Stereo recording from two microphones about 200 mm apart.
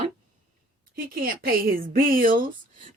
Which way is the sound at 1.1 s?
45° right (ahead or behind).